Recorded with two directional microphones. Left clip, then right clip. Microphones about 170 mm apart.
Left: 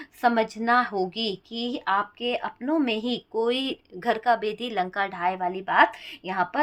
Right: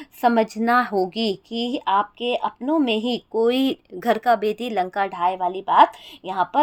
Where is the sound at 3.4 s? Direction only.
40° right (ahead or behind).